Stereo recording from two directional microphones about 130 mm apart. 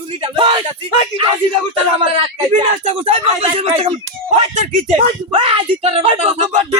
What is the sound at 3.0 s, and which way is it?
Speech, 55° right (ahead or behind).